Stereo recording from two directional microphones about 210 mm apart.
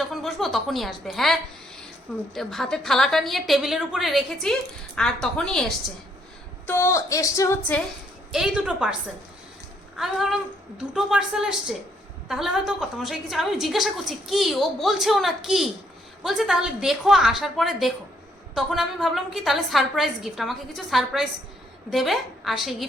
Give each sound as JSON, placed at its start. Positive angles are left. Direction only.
{"t": 0.0, "sound": "a woman's voice", "side_deg": 0}
{"t": 8.3, "sound": "a woman's voice", "side_deg": -5}
{"t": 10.0, "sound": "a woman's voice", "side_deg": 0}